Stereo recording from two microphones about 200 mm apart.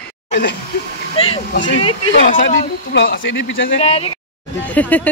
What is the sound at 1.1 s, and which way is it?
Speech, 30° left (ahead or behind).